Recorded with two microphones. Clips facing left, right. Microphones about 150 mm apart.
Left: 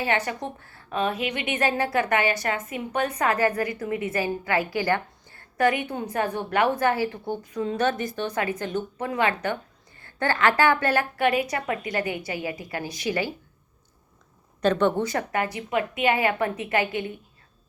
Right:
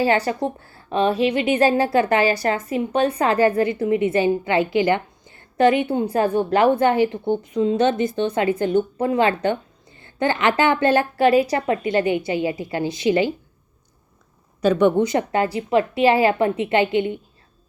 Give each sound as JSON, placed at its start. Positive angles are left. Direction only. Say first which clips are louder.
{"t": 0.0, "sound": "a woman's voice", "louder": "right 7 dB", "side_deg": -30}
{"t": 14.6, "sound": "a woman's voice", "louder": "right 5 dB", "side_deg": -10}